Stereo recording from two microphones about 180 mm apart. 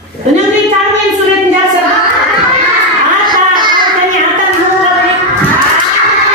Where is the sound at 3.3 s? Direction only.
25° right (ahead or behind).